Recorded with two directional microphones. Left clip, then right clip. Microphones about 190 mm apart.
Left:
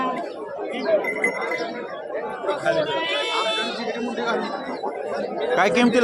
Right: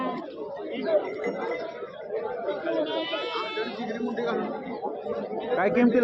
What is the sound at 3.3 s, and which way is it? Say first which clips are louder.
Chatter: left 7 dB; 60° left (ahead or behind).